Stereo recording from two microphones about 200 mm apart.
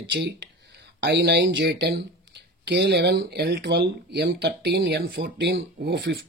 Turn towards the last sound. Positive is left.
turn(degrees=-55)  # may be behind; listen again after turning